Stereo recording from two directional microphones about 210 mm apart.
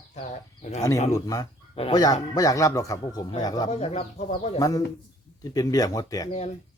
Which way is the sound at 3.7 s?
30° left (ahead or behind).